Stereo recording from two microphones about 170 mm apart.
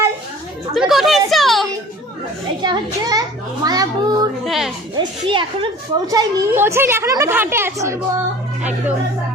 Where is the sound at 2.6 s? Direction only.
25° right (ahead or behind).